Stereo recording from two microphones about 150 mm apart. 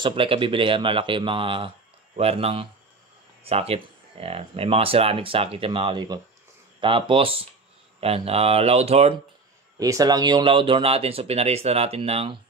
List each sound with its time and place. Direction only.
0.0 s speech: 35° right (ahead or behind)
9.8 s speech: 25° right (ahead or behind); by 12.4 s 40° right (ahead or behind)